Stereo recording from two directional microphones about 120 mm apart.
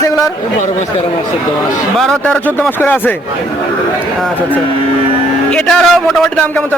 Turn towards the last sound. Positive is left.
turn(degrees=0)  # may be behind; listen again after turning